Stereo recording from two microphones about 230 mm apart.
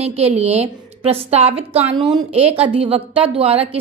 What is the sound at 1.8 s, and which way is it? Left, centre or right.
Speech, centre.